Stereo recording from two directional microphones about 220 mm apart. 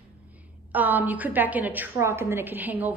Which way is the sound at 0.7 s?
10° right (ahead or behind).